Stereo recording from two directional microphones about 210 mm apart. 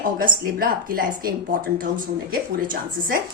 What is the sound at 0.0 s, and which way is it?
A woman's voice, 40° right (ahead or behind).